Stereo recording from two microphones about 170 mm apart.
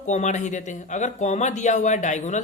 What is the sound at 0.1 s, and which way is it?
Speech, 45° left (ahead or behind).